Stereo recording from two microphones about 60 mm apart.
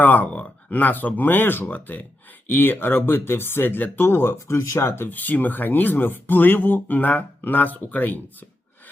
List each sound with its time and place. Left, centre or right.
0.0 s speech: left
4.0 s speech: left
4.9 s speech: left